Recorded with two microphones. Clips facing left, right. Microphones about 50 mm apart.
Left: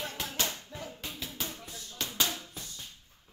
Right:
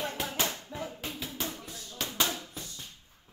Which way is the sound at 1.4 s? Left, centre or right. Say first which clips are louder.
Right 2 dB; centre.